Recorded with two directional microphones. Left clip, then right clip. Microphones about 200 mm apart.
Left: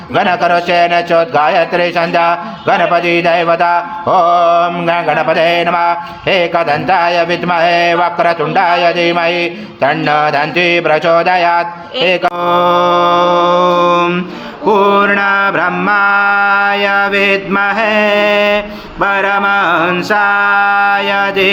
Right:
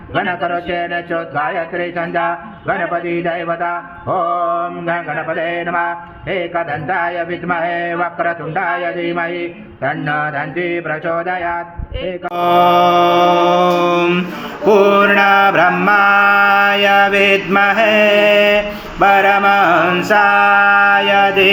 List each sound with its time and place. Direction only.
0.2 s speech: 50° left (ahead or behind)
12.4 s mantra: 35° left (ahead or behind)